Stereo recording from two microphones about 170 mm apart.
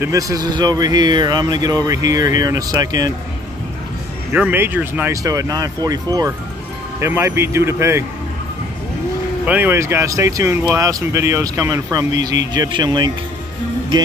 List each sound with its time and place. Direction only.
0.0 s speech: 20° right (ahead or behind)
4.3 s speech: 10° right (ahead or behind)
9.5 s speech: 10° right (ahead or behind)